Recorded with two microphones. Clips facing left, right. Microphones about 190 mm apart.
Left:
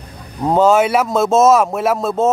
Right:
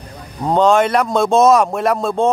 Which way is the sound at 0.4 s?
5° left (ahead or behind).